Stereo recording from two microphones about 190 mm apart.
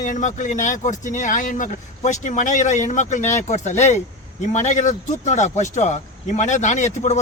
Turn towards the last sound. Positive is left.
turn(degrees=35)  # may be behind; listen again after turning